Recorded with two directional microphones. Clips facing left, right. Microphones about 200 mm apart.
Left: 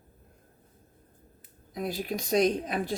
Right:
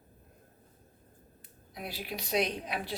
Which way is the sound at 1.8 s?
45° left (ahead or behind).